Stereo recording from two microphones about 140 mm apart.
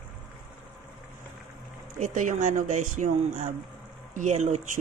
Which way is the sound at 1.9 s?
60° right (ahead or behind).